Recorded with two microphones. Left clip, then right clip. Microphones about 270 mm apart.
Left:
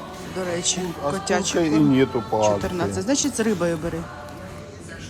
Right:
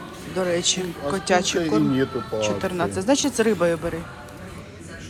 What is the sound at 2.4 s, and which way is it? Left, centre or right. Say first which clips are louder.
Speech: left 1 dB; centre.